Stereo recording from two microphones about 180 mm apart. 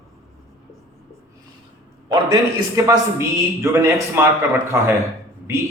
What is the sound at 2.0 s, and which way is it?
A man's voice, 20° right (ahead or behind).